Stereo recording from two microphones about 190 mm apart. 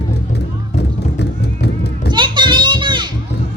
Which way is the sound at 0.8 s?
60° left (ahead or behind).